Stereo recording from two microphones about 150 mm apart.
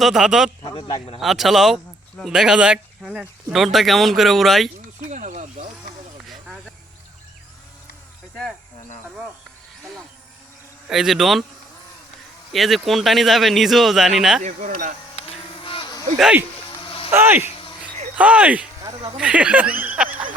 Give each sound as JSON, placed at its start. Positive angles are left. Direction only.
{"t": 0.0, "sound": "speech", "side_deg": -5}
{"t": 0.6, "sound": "a man's voice", "side_deg": 35}
{"t": 1.2, "sound": "speech", "side_deg": 0}
{"t": 5.0, "sound": "snake", "side_deg": -55}
{"t": 6.2, "sound": "a sound", "side_deg": 0}
{"t": 10.8, "sound": "speech", "side_deg": -5}
{"t": 12.5, "sound": "speech", "side_deg": 0}
{"t": 14.4, "sound": "speech", "side_deg": -55}
{"t": 15.1, "sound": "a sound", "side_deg": 40}
{"t": 16.1, "sound": "speech", "side_deg": -5}
{"t": 16.6, "sound": "a sound", "side_deg": 35}
{"t": 17.1, "sound": "speech", "side_deg": -15}